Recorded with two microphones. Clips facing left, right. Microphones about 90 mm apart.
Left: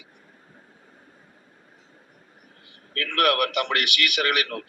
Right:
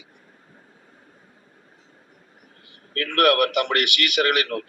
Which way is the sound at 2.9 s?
45° right (ahead or behind).